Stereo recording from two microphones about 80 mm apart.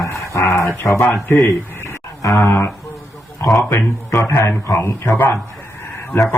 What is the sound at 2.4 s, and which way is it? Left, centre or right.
Speech, left.